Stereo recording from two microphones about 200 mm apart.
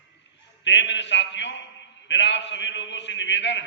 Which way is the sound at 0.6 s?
65° left (ahead or behind).